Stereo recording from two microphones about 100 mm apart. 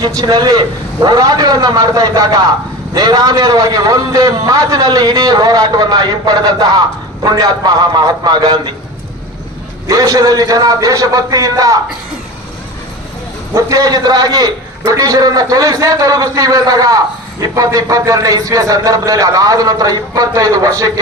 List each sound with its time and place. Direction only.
0.0 s a man's voice: 40° right (ahead or behind)
9.8 s a man's voice: 35° right (ahead or behind)
13.5 s a man's voice: 35° right (ahead or behind)